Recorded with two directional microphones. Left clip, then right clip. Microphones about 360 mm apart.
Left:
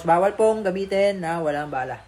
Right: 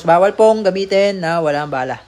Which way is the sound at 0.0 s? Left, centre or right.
Right.